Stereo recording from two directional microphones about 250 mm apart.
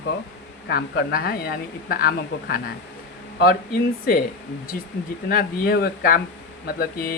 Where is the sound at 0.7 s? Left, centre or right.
Left.